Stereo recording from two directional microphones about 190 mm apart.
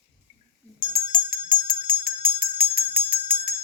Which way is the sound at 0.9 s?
45° right (ahead or behind).